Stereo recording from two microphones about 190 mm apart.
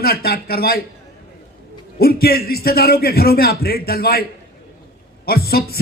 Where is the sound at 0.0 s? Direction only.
55° left (ahead or behind).